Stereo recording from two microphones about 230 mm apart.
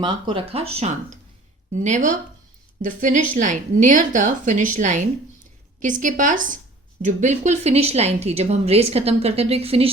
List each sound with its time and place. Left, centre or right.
0.0 s a woman's voice: right